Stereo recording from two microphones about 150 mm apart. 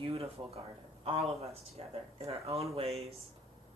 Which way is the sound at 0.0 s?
40° right (ahead or behind).